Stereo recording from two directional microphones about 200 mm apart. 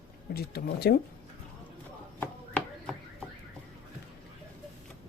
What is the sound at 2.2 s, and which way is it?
Chopping, 5° left (ahead or behind).